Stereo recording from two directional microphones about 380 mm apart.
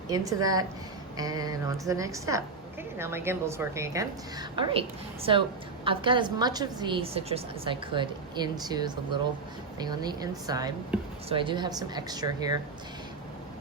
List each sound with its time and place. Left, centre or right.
0.1 s a woman's voice: centre